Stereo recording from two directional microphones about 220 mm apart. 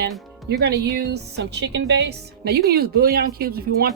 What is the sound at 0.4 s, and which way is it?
Speech, 50° right (ahead or behind).